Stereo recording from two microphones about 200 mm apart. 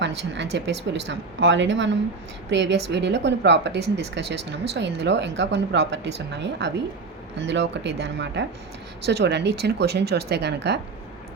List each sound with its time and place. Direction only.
0.0 s speech: 60° right (ahead or behind)